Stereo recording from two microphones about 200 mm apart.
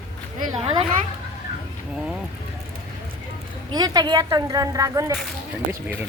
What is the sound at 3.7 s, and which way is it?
A woman's voice, 20° right (ahead or behind).